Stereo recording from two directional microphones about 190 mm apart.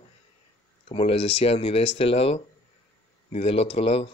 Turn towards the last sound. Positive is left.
turn(degrees=30)  # may be behind; listen again after turning